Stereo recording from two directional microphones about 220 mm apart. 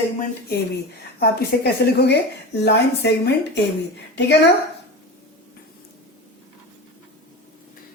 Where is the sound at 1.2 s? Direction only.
45° left (ahead or behind).